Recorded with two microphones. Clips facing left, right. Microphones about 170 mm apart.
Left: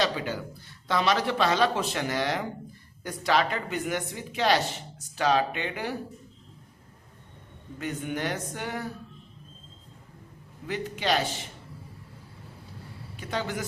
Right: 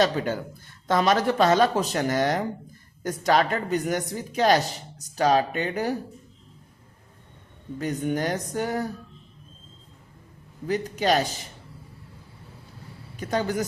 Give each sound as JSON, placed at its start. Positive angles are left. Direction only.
{"t": 0.0, "sound": "speech", "side_deg": -50}
{"t": 7.8, "sound": "speech", "side_deg": -40}
{"t": 10.7, "sound": "speech", "side_deg": -40}
{"t": 13.1, "sound": "speech", "side_deg": -45}